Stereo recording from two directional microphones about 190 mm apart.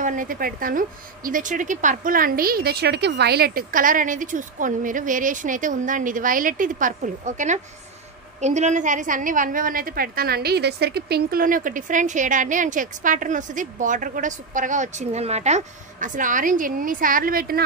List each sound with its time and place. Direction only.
0.0 s a woman's voice: 45° right (ahead or behind)